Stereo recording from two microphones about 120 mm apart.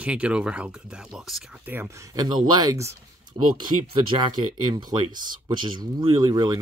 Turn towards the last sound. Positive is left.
turn(degrees=-35)  # may be behind; listen again after turning